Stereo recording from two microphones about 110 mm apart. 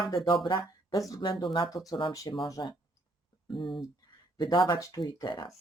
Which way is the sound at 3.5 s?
50° left (ahead or behind).